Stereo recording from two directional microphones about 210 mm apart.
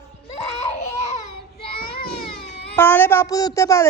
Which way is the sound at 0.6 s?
35° left (ahead or behind).